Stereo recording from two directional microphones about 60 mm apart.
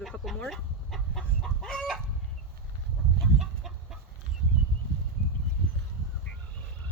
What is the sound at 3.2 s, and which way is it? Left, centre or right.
Chicken, centre.